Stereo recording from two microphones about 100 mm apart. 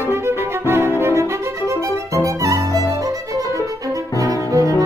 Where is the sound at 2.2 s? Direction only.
35° right (ahead or behind).